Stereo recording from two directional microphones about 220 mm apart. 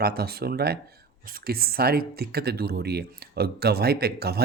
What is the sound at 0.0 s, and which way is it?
Speech, 45° right (ahead or behind).